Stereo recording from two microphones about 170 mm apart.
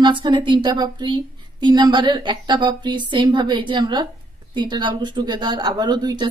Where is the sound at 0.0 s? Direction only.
25° right (ahead or behind).